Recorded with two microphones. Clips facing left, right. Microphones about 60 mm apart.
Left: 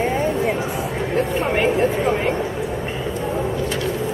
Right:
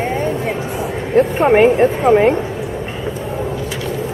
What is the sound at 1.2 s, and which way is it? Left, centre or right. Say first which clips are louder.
Speech: right 10 dB; right.